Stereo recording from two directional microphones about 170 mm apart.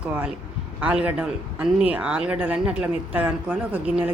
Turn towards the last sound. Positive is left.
turn(degrees=-10)  # may be behind; listen again after turning